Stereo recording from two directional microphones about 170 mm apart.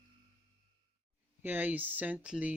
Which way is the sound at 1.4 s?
10° right (ahead or behind).